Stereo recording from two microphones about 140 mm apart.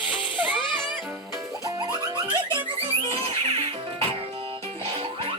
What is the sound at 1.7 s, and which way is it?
Music, 25° right (ahead or behind).